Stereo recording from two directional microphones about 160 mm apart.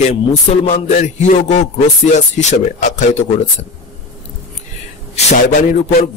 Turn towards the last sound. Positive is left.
turn(degrees=50)  # may be behind; listen again after turning